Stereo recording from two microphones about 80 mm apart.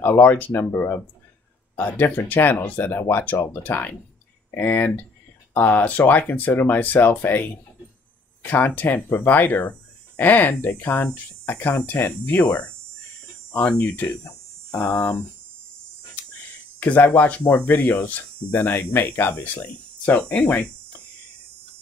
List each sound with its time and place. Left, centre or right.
0.0 s speech: left
16.8 s speech: left